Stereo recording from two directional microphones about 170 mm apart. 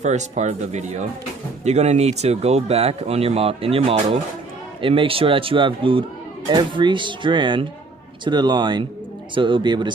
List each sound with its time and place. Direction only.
0.0 s speech: 45° right (ahead or behind); by 9.9 s 25° right (ahead or behind)